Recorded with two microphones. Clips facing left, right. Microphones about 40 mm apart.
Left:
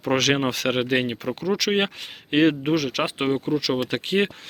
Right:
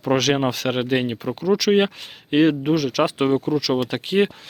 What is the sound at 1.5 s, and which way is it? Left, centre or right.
Speech, left.